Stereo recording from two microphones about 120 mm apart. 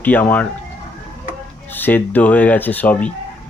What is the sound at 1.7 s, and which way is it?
Speech, 15° left (ahead or behind).